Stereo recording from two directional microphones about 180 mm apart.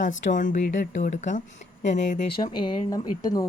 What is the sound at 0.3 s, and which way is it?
Speech, 45° left (ahead or behind).